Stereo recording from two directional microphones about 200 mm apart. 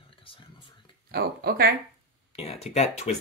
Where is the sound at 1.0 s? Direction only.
50° right (ahead or behind).